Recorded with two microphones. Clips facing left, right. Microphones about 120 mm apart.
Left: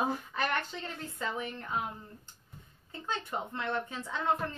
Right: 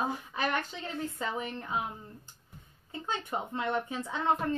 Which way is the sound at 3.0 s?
15° right (ahead or behind).